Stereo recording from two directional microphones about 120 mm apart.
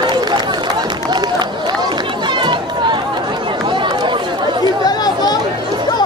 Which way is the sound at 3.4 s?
45° right (ahead or behind).